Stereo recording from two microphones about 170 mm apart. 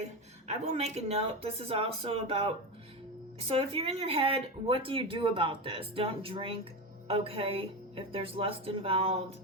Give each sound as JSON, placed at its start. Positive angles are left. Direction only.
{"t": 0.0, "sound": "speech", "side_deg": -40}